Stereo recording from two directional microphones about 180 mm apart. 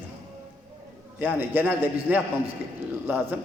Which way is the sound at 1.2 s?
10° right (ahead or behind).